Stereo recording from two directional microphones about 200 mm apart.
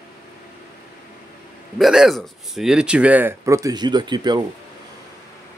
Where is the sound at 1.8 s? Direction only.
Centre (ahead or behind); by 4.5 s 20° right (ahead or behind).